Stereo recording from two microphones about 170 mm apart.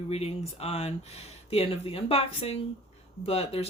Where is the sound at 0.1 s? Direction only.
35° left (ahead or behind).